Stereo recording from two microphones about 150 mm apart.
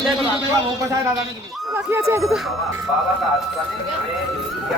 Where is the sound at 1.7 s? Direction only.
20° right (ahead or behind).